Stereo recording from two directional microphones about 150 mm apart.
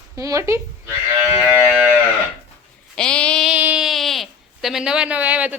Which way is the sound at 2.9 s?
5° left (ahead or behind).